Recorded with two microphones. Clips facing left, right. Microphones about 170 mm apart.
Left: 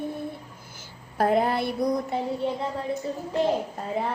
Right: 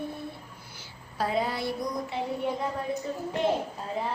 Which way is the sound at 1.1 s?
55° left (ahead or behind).